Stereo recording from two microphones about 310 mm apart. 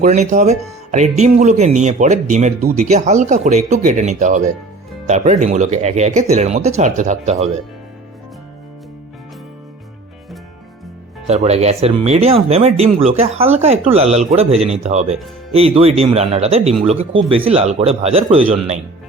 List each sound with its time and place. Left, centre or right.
0.0 s speech: right
11.3 s speech: right